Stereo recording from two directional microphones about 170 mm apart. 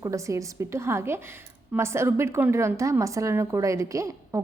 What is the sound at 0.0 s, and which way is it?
A woman's voice, 20° right (ahead or behind).